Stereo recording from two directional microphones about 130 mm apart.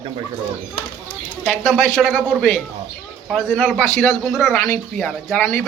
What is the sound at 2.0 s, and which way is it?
Speech, 5° right (ahead or behind).